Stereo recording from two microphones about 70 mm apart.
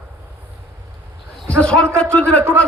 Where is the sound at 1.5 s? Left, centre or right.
Centre.